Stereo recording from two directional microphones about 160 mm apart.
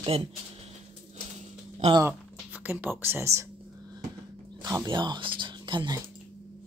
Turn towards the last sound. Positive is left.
turn(degrees=-30)  # may be behind; listen again after turning